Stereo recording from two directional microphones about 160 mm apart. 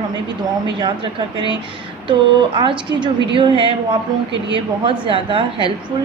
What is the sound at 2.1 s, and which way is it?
A woman's voice, 30° right (ahead or behind).